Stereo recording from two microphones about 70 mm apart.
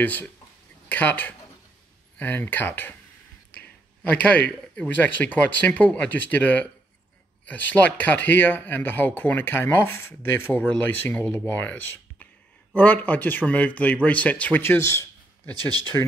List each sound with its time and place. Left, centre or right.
0.0 s a man's voice: left
14.6 s speech: left
15.5 s speech: right
15.8 s speech: left